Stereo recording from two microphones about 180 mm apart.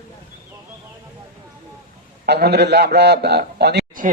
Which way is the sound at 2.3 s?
65° right (ahead or behind).